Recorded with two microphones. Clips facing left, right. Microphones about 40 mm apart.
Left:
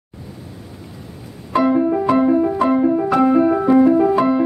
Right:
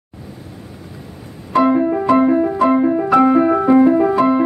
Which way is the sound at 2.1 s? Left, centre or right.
Centre.